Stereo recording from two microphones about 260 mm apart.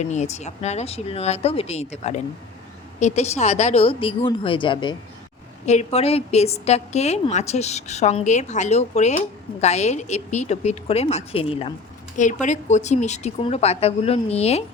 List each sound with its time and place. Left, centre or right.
0.0 s a woman's voice: left